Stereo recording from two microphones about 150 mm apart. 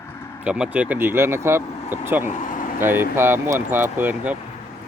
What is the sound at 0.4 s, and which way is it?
Speech, 10° right (ahead or behind).